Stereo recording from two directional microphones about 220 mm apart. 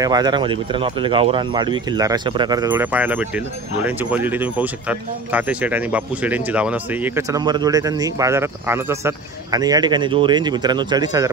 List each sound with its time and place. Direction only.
0.0 s speech: 20° right (ahead or behind)